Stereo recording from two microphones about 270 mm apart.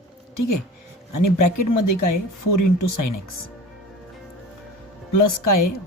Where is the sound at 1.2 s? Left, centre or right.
Left.